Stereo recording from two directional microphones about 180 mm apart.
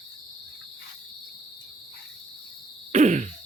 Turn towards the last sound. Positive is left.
turn(degrees=-40)  # may be behind; listen again after turning